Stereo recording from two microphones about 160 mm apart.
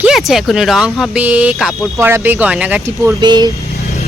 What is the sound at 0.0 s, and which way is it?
Speech, centre (ahead or behind).